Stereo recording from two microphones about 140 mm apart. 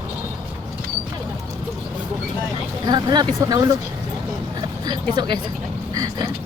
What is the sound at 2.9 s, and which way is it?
Speech, 30° right (ahead or behind).